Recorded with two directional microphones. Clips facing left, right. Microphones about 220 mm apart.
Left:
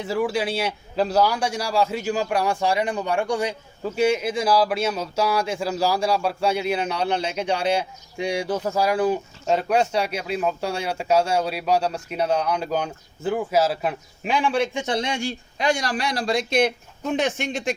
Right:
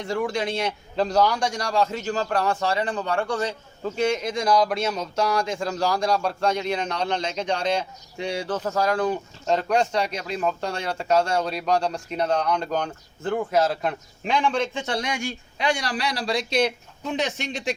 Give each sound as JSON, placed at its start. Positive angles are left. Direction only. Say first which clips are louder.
{"t": 0.0, "sound": "a man's voice", "louder": "left 2 dB", "side_deg": 5}